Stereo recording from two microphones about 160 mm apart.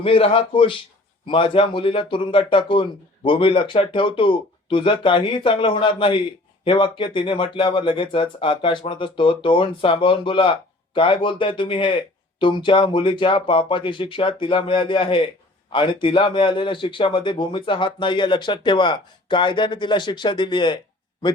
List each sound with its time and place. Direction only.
0.0 s speech: 35° left (ahead or behind)